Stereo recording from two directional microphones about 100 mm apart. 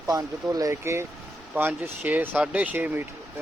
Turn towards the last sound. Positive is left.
turn(degrees=-15)  # may be behind; listen again after turning